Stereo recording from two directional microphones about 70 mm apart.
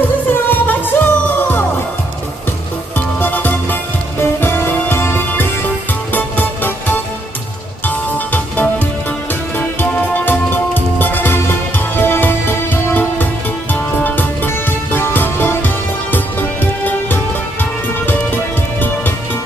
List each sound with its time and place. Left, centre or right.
0.3 s music: left
3.2 s music: left